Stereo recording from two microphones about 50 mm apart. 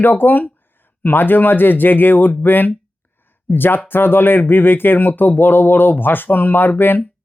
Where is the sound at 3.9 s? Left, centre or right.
Left.